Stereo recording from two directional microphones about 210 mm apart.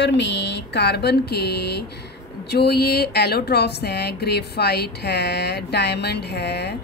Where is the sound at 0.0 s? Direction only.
55° left (ahead or behind).